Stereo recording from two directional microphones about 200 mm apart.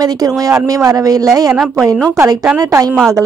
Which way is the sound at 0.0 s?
20° right (ahead or behind).